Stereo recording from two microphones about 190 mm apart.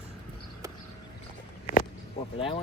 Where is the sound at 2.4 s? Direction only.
30° left (ahead or behind).